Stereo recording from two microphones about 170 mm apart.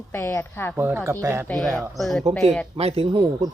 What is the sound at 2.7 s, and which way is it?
Speech, 35° right (ahead or behind).